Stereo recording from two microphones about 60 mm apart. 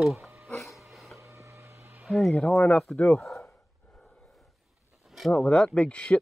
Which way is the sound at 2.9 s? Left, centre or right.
Centre.